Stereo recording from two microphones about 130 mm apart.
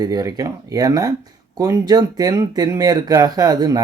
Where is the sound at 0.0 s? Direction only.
30° right (ahead or behind).